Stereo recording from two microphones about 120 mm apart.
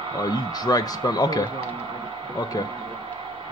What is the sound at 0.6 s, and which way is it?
Speech, 35° left (ahead or behind).